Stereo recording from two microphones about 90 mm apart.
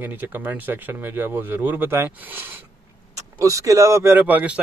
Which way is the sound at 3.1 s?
35° right (ahead or behind).